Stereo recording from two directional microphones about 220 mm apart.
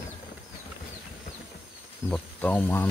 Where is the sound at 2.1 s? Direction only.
5° left (ahead or behind).